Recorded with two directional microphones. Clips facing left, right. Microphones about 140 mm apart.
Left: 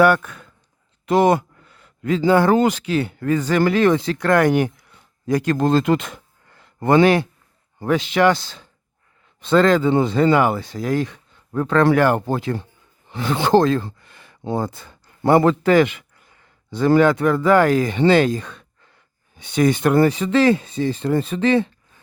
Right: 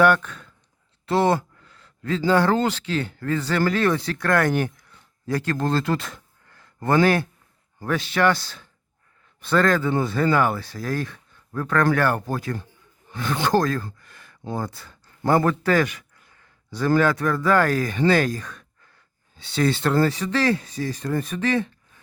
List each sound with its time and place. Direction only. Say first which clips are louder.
0.0 s speech: left 3 dB; 10° left (ahead or behind); by 22.0 s 30° left (ahead or behind)